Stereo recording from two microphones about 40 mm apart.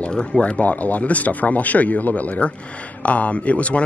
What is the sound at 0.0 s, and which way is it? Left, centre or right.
Speech, left.